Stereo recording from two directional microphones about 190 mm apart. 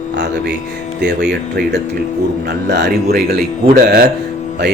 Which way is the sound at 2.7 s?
60° right (ahead or behind).